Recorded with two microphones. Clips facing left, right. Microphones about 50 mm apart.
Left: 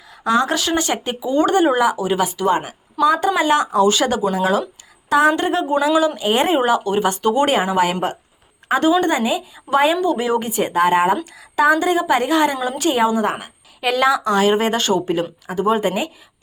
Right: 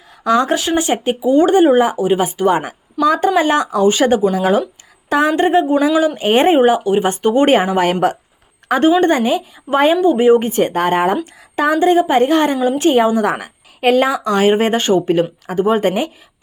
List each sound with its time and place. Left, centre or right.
0.3 s speech: right
0.5 s speech: centre; by 3.7 s right
3.8 s a woman's voice: right
6.1 s speech: right
7.5 s speech: right
10.0 s speech: right
10.5 s speech: right
11.2 s speech: right
12.6 s speech: right
12.9 s speech: right